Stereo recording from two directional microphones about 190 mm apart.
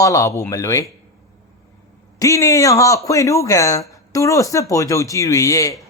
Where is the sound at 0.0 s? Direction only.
15° left (ahead or behind).